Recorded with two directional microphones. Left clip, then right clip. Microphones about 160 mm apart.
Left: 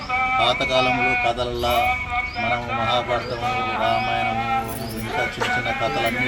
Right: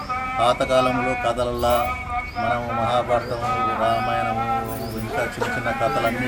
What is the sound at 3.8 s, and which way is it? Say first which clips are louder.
Speech: left 2 dB; 25° right (ahead or behind).